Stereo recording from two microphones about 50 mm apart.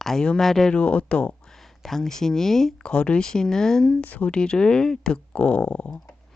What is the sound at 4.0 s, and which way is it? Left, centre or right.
Speech, left.